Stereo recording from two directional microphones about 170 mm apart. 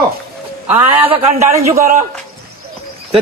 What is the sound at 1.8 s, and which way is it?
Speech, 50° right (ahead or behind).